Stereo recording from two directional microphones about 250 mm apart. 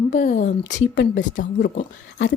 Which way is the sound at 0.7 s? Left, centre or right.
Left.